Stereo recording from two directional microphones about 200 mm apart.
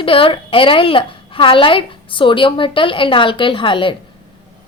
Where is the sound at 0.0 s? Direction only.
25° left (ahead or behind).